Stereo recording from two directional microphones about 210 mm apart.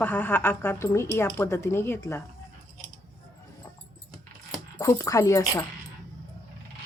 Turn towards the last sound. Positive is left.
turn(degrees=15)  # may be behind; listen again after turning